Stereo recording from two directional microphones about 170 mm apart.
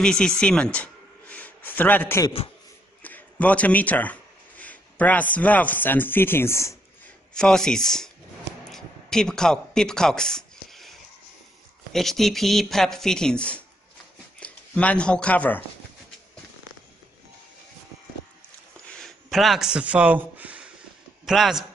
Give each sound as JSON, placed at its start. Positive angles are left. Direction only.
{"t": 0.0, "sound": "speech", "side_deg": 5}
{"t": 7.3, "sound": "speech", "side_deg": 5}
{"t": 8.7, "sound": "a sound", "side_deg": 5}
{"t": 11.9, "sound": "speech", "side_deg": 0}
{"t": 18.9, "sound": "a sound", "side_deg": 0}
{"t": 21.3, "sound": "speech", "side_deg": 0}